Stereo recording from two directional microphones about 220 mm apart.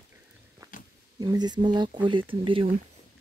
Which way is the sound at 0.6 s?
15° right (ahead or behind).